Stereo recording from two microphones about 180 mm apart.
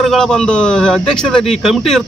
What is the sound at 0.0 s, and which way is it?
A man's voice, centre (ahead or behind).